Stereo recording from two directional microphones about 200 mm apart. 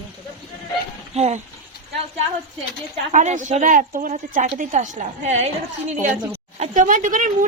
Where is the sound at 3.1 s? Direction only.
40° right (ahead or behind).